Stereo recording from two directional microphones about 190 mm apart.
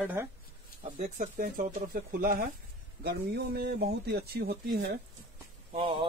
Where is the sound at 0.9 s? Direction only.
40° right (ahead or behind).